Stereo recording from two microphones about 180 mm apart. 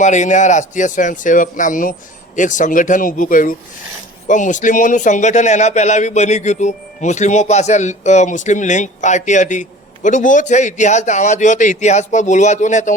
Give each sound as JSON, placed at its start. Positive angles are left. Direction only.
{"t": 0.0, "sound": "a man's voice", "side_deg": 40}